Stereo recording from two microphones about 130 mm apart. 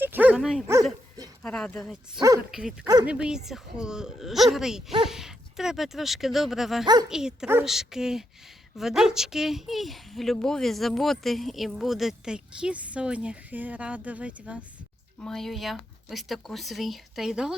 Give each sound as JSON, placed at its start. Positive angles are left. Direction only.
{"t": 0.0, "sound": "dog", "side_deg": -15}
{"t": 1.4, "sound": "speech", "side_deg": 5}
{"t": 1.8, "sound": "a woman's voice", "side_deg": -5}
{"t": 6.8, "sound": "speech", "side_deg": -30}
{"t": 7.1, "sound": "a woman's voice", "side_deg": -5}
{"t": 15.2, "sound": "a woman's voice", "side_deg": 5}